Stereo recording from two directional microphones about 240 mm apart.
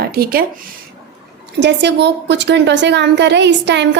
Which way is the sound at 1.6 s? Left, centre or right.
Right.